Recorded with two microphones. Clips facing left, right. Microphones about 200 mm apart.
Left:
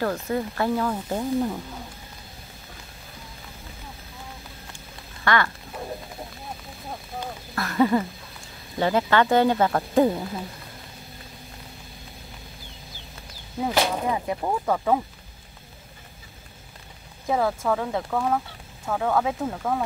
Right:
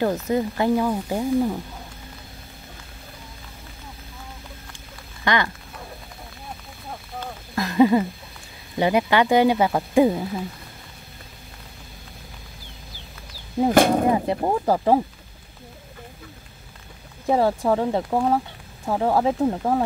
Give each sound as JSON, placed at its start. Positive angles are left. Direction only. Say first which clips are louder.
{"t": 0.0, "sound": "speech", "louder": "right 4 dB", "side_deg": -20}
{"t": 5.2, "sound": "a sound", "louder": "right 1 dB", "side_deg": -20}
{"t": 7.5, "sound": "a sound", "louder": "right 4 dB", "side_deg": -15}
{"t": 8.7, "sound": "speech", "louder": "right 2 dB", "side_deg": -15}
{"t": 13.7, "sound": "speech", "louder": "right 7 dB", "side_deg": -50}
{"t": 14.1, "sound": "speech", "louder": "right 5 dB", "side_deg": -30}
{"t": 17.3, "sound": "speech", "louder": "right 4 dB", "side_deg": -30}